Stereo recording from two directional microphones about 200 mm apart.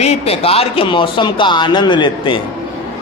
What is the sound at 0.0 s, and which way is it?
Speech, 30° left (ahead or behind).